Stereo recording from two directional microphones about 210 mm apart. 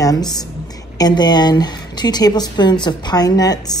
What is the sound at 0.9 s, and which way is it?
A woman's voice, 20° left (ahead or behind).